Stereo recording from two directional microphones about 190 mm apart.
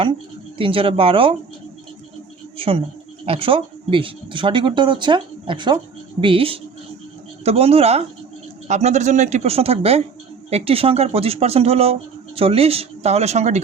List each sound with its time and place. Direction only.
0.6 s speech: 30° right (ahead or behind)
2.6 s speech: 30° right (ahead or behind)